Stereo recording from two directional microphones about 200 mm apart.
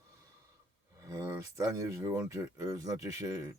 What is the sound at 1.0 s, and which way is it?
Speech, 15° right (ahead or behind).